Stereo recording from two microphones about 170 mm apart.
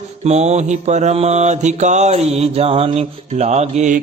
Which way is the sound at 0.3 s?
40° right (ahead or behind).